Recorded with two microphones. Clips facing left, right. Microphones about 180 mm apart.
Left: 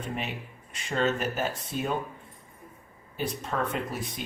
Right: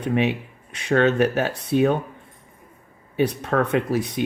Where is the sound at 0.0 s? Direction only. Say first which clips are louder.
Right 12 dB; 75° right (ahead or behind).